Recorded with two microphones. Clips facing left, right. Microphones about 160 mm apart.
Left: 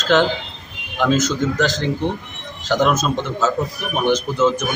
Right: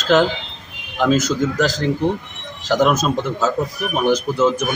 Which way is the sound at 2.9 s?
30° right (ahead or behind).